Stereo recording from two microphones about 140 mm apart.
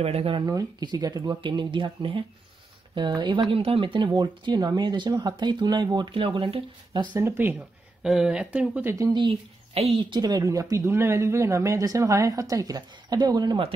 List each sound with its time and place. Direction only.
0.0 s speech: 45° right (ahead or behind)
0.5 s speech: 25° right (ahead or behind)
7.2 s speech: 15° right (ahead or behind)
8.0 s speech: 5° right (ahead or behind)
8.9 s speech: 30° right (ahead or behind)
9.8 s speech: 40° right (ahead or behind)